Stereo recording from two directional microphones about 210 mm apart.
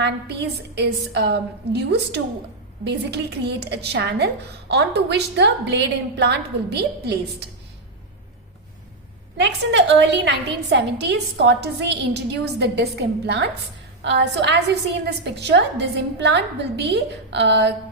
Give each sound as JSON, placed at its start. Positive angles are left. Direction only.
{"t": 0.8, "sound": "a woman's voice", "side_deg": -55}
{"t": 9.4, "sound": "a woman's voice", "side_deg": -55}